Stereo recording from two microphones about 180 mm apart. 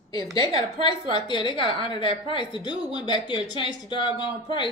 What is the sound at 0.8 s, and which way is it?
Speech, 25° left (ahead or behind).